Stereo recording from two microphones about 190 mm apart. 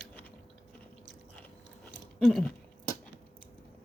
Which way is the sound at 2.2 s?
Centre (ahead or behind).